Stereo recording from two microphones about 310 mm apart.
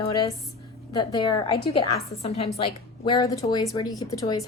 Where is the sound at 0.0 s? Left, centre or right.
Centre.